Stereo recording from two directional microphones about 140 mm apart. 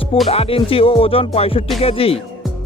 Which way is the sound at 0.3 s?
45° left (ahead or behind).